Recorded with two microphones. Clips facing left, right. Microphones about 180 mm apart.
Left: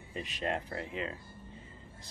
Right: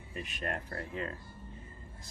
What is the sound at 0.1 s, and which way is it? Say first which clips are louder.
Speech: left 3 dB; 25° left (ahead or behind).